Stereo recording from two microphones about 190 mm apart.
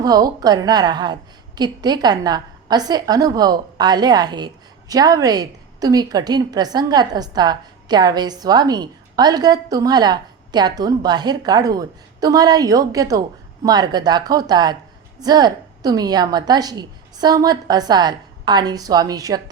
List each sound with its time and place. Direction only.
0.0 s a woman's voice: 20° right (ahead or behind)